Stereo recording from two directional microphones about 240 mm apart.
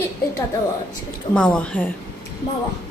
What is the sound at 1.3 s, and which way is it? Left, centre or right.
Speech, centre.